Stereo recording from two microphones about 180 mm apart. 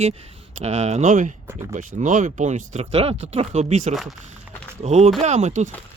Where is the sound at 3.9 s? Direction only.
Centre (ahead or behind).